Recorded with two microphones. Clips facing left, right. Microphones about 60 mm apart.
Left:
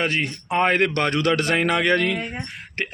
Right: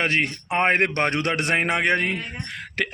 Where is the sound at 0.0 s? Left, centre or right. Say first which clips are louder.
Right 1 dB; right.